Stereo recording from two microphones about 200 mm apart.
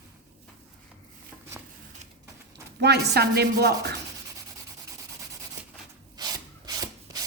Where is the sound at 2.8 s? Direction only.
55° right (ahead or behind).